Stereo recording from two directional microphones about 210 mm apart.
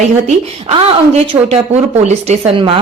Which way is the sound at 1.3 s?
30° right (ahead or behind).